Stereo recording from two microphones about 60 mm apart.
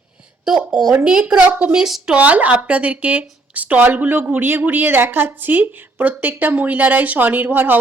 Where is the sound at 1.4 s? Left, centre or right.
Right.